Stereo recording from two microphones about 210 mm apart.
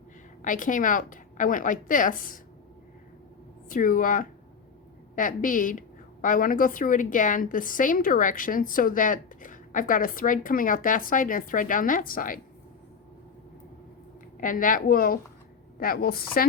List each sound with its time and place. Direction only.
0.4 s a woman's voice: 40° left (ahead or behind)
3.7 s a woman's voice: 40° left (ahead or behind)
14.4 s a woman's voice: 40° left (ahead or behind)